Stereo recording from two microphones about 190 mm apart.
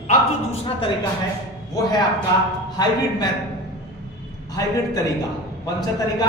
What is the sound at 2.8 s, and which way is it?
Speech, 20° left (ahead or behind).